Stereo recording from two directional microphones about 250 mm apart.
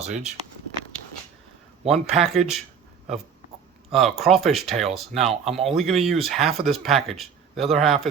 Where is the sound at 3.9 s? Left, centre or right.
Centre.